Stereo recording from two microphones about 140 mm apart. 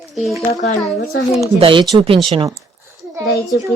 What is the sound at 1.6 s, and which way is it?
Speech, 35° right (ahead or behind).